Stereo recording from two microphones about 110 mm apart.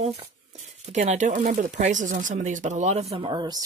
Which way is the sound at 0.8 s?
85° right.